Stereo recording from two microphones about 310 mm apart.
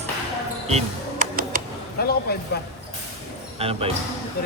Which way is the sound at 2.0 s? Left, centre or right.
Left.